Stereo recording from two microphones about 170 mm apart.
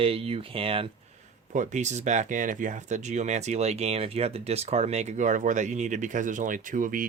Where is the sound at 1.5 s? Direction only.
45° right (ahead or behind).